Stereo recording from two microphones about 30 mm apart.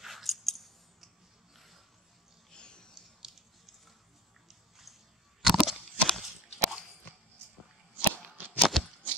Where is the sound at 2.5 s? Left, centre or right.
Left.